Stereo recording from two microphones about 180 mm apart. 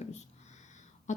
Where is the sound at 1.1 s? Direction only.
40° left (ahead or behind).